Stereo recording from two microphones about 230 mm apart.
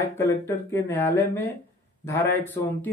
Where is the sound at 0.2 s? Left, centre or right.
Centre.